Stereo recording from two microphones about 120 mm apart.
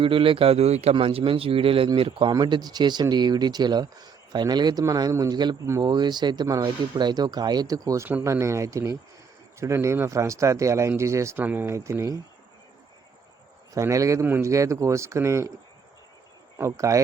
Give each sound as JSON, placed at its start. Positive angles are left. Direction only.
{"t": 0.0, "sound": "speech", "side_deg": -45}
{"t": 2.3, "sound": "speech", "side_deg": -35}
{"t": 13.7, "sound": "speech", "side_deg": -25}
{"t": 14.3, "sound": "speech", "side_deg": -15}
{"t": 14.5, "sound": "speech", "side_deg": -25}
{"t": 16.6, "sound": "speech", "side_deg": -25}